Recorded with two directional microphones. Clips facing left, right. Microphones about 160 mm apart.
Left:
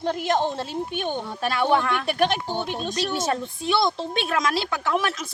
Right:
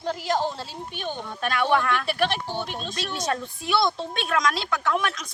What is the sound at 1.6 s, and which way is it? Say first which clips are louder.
Speech: left 1 dB; 20° left (ahead or behind).